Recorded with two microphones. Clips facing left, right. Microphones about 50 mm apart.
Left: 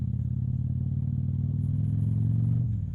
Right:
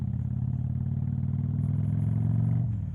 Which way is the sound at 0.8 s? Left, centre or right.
Right.